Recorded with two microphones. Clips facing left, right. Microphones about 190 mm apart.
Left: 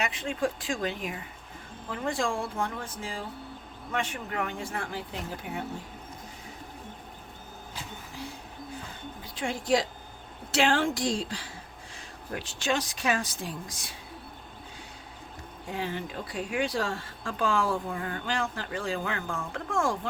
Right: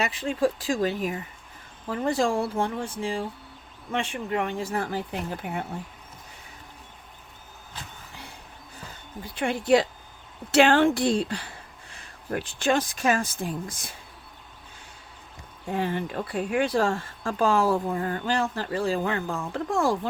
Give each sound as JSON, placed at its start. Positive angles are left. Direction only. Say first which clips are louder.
{"t": 0.0, "sound": "speech", "louder": "right 5 dB", "side_deg": -35}
{"t": 5.4, "sound": "speech", "louder": "right 2 dB", "side_deg": -55}
{"t": 9.2, "sound": "speech", "louder": "right 6 dB", "side_deg": -60}
{"t": 15.7, "sound": "speech", "louder": "right 6 dB", "side_deg": -55}